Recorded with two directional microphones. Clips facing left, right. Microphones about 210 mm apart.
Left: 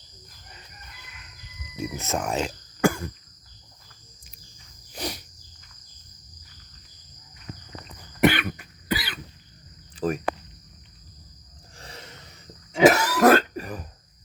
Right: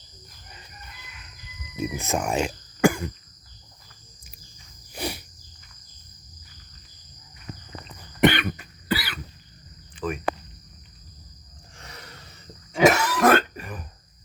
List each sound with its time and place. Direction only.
1.7 s music: 15° right (ahead or behind)
4.9 s insect: 10° right (ahead or behind)
8.2 s cough: centre (ahead or behind)
8.9 s cough: 20° left (ahead or behind)
9.9 s a sound: 40° left (ahead or behind)
11.8 s cough: 30° left (ahead or behind)
12.9 s throat clearing: 35° left (ahead or behind)